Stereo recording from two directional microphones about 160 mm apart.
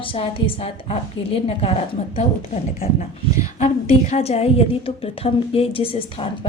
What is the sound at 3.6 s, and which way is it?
A woman's voice, 45° left (ahead or behind).